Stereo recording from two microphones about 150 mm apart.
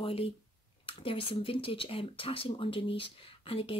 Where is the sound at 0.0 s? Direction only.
40° left (ahead or behind).